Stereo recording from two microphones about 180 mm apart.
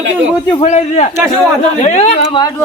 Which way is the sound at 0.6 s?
40° left (ahead or behind).